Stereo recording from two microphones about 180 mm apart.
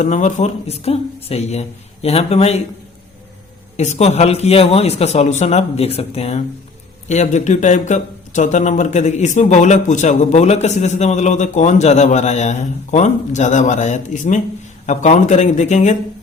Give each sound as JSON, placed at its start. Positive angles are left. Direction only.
{"t": 0.0, "sound": "a man's voice", "side_deg": 40}
{"t": 3.8, "sound": "a man's voice", "side_deg": 35}